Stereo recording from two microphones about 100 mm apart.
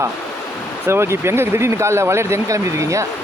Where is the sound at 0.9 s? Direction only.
25° right (ahead or behind).